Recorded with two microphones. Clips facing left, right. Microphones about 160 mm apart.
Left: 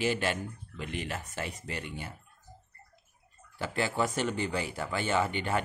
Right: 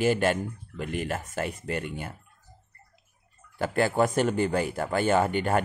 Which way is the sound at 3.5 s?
50° right (ahead or behind).